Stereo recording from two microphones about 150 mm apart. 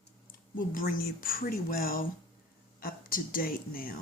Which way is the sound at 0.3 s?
70° left (ahead or behind).